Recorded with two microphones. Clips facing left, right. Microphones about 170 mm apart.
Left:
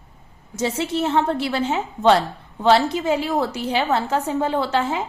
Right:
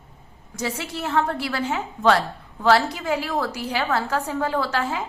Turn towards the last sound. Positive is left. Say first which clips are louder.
# left 3 dB
turn(degrees=25)  # may be behind; listen again after turning